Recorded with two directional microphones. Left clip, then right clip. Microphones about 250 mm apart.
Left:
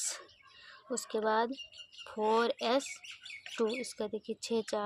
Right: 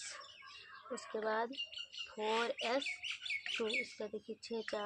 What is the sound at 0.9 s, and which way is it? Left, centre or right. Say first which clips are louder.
Speech: left 7 dB; left.